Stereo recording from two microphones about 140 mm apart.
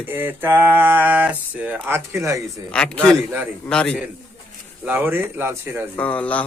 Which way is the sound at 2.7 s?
5° left (ahead or behind).